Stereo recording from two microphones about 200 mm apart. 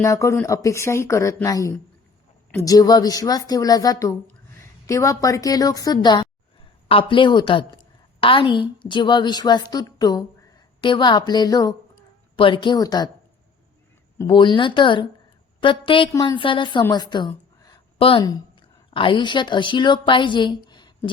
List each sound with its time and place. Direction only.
0.0 s a woman's voice: 15° left (ahead or behind)
14.3 s a woman's voice: 25° left (ahead or behind)